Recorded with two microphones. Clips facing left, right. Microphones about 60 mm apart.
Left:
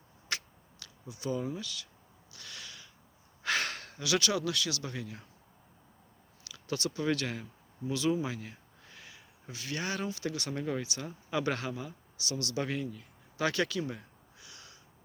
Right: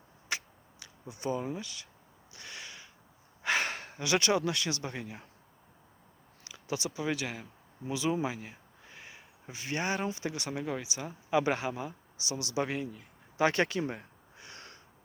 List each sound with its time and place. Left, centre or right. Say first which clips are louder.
0.3 s tick-tock: right 1 dB; centre
1.0 s speech: right 1 dB; right
2.3 s a sound: right 2 dB; right
3.4 s speech: right 2 dB; right
6.4 s speech: even; right
10.4 s speech: left 1 dB; centre
11.3 s speech: right 4 dB; centre; by 14.8 s right